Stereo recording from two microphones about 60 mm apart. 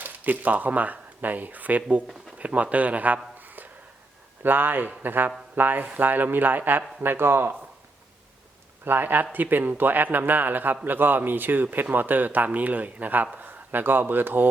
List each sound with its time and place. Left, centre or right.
0.0 s a man's voice: right
8.8 s a man's voice: right